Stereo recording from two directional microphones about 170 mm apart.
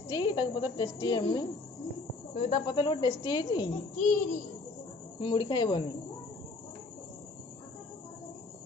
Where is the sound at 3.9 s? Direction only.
45° left (ahead or behind).